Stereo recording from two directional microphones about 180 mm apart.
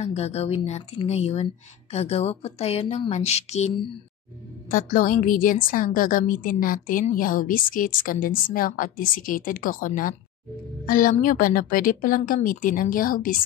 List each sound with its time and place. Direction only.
0.0 s speech: 35° left (ahead or behind)
4.6 s a woman's voice: 50° left (ahead or behind)